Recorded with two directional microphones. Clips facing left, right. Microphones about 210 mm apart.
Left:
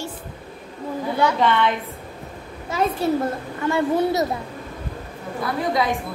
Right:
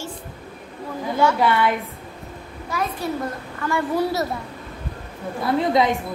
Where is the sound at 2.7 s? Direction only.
25° left (ahead or behind).